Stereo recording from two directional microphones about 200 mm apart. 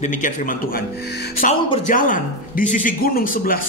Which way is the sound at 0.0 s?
40° left (ahead or behind).